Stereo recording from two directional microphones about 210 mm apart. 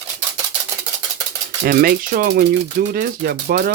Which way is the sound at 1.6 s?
45° right (ahead or behind).